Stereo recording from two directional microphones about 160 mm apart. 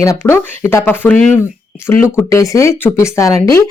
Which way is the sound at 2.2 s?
20° left (ahead or behind).